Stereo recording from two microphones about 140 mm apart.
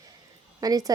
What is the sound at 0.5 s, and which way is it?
Speech, 25° right (ahead or behind).